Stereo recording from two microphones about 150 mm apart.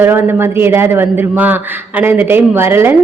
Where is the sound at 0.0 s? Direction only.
15° right (ahead or behind).